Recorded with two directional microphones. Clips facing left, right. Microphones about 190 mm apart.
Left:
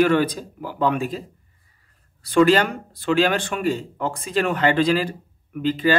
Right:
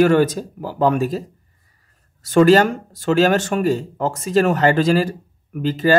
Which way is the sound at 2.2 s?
45° right (ahead or behind).